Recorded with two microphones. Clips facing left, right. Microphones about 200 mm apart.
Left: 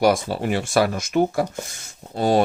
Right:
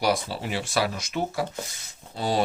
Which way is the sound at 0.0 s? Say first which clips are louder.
Left 7 dB; 50° left (ahead or behind).